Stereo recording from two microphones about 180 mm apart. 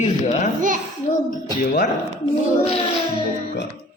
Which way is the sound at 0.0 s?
40° left (ahead or behind).